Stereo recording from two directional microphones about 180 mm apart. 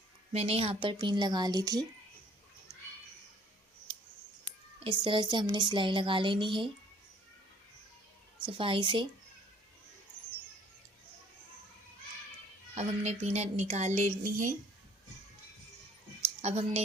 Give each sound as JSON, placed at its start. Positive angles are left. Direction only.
{"t": 0.3, "sound": "speech", "side_deg": -35}
{"t": 4.8, "sound": "speech", "side_deg": -25}
{"t": 8.4, "sound": "speech", "side_deg": -30}
{"t": 12.7, "sound": "a woman's voice", "side_deg": -40}
{"t": 16.4, "sound": "a woman's voice", "side_deg": -35}